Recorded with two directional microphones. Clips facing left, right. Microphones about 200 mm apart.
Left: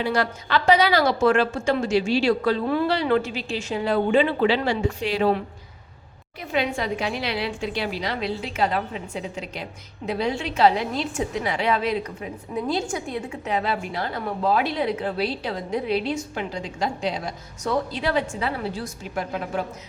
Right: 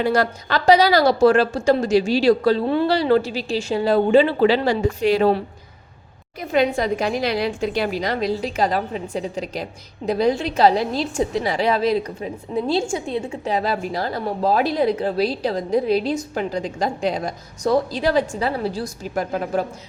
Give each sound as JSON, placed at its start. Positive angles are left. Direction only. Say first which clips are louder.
{"t": 0.0, "sound": "a woman's voice", "louder": "right 4 dB", "side_deg": -40}
{"t": 6.5, "sound": "a woman's voice", "louder": "right 6 dB", "side_deg": -40}